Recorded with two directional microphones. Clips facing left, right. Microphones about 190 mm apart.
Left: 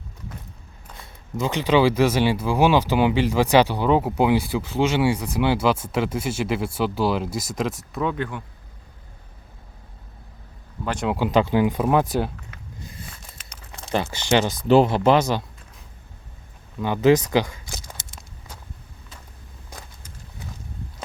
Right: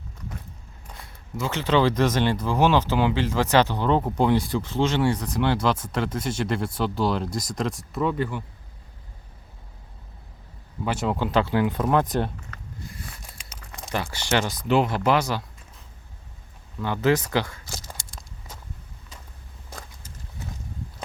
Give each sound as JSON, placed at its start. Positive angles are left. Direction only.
{"t": 1.4, "sound": "speech", "side_deg": 15}
{"t": 10.8, "sound": "speech", "side_deg": -5}
{"t": 11.1, "sound": "speech", "side_deg": 15}
{"t": 12.8, "sound": "a sound", "side_deg": 20}
{"t": 13.9, "sound": "speech", "side_deg": 20}
{"t": 14.7, "sound": "speech", "side_deg": 30}
{"t": 16.8, "sound": "speech", "side_deg": 15}
{"t": 17.7, "sound": "a sound", "side_deg": 20}